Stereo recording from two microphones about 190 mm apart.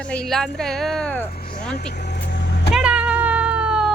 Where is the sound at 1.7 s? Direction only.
55° left (ahead or behind).